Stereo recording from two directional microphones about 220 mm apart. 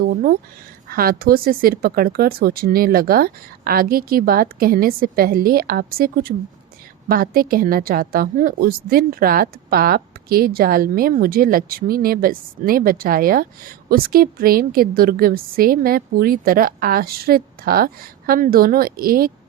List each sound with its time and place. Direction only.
0.0 s a woman's voice: 40° right (ahead or behind)